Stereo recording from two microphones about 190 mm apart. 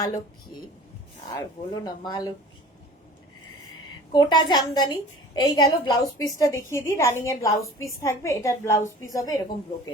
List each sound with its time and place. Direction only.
1.3 s speech: 20° left (ahead or behind)
4.1 s a woman's voice: 20° left (ahead or behind)